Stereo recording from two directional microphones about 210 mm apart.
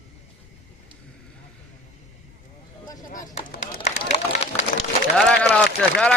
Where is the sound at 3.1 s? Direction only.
40° left (ahead or behind).